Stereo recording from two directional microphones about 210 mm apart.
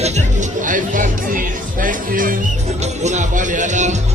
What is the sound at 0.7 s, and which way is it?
Music, 40° right (ahead or behind).